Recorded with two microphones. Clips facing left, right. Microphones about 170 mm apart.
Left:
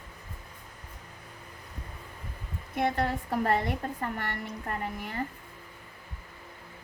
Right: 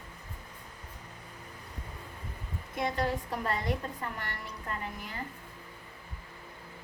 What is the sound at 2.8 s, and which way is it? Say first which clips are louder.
A woman's voice: left 3 dB; 60° left (ahead or behind).